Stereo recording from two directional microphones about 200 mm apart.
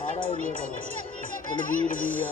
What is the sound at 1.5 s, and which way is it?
Speech, 40° left (ahead or behind).